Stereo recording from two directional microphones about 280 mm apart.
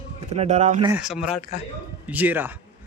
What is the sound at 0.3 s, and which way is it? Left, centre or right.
Speech, right.